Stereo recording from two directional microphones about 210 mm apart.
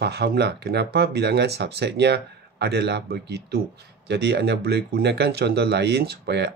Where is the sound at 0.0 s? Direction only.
50° right (ahead or behind).